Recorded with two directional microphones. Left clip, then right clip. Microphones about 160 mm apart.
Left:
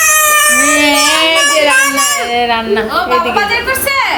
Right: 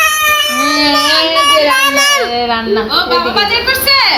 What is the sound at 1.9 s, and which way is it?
Speech, 60° right (ahead or behind).